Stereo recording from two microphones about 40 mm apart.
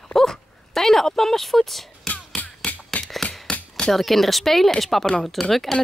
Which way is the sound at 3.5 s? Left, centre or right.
Left.